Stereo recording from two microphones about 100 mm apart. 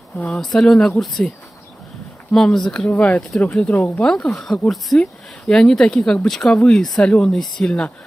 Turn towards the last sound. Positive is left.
turn(degrees=5)  # may be behind; listen again after turning